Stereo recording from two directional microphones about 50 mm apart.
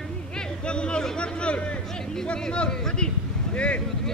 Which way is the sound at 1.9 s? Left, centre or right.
Centre.